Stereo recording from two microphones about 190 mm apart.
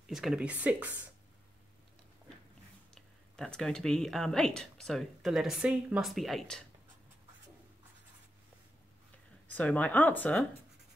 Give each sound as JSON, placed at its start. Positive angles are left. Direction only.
{"t": 0.0, "sound": "speech", "side_deg": 0}
{"t": 2.9, "sound": "speech", "side_deg": 5}
{"t": 9.5, "sound": "speech", "side_deg": 10}